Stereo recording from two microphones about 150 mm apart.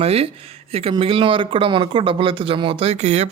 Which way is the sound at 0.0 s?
40° right (ahead or behind).